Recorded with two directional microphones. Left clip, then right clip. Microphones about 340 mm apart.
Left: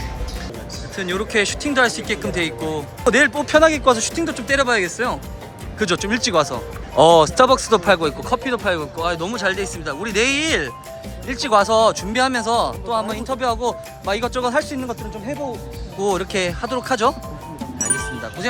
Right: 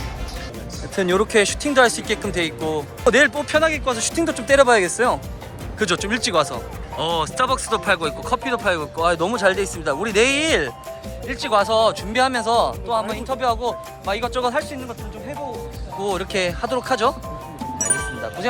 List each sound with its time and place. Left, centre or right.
0.9 s speech: centre
17.6 s music: centre